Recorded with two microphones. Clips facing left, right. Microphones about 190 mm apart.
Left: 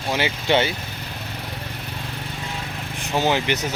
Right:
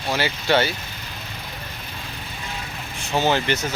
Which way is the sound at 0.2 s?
20° left (ahead or behind).